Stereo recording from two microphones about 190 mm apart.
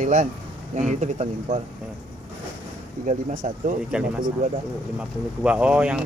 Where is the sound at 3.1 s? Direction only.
40° right (ahead or behind).